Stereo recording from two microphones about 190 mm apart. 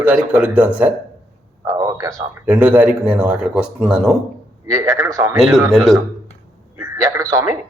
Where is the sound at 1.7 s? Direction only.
20° right (ahead or behind).